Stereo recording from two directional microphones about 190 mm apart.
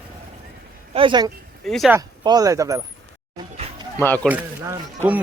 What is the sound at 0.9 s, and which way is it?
Speech, 25° right (ahead or behind).